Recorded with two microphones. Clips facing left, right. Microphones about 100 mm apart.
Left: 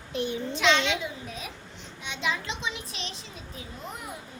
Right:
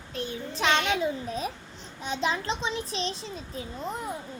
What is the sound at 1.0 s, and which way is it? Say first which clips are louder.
A child's voice: right 7 dB; 35° right (ahead or behind).